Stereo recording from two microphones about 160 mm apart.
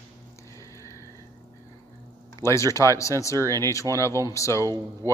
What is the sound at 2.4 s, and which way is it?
Speech, 15° left (ahead or behind).